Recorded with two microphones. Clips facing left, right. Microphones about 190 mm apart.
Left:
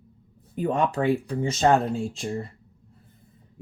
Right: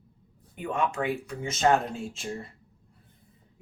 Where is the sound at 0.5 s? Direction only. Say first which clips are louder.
Left 5 dB; 35° left (ahead or behind).